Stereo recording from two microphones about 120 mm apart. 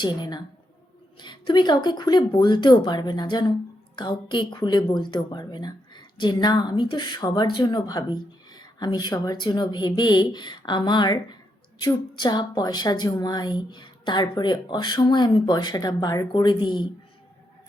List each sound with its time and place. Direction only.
0.0 s a woman's voice: 40° left (ahead or behind)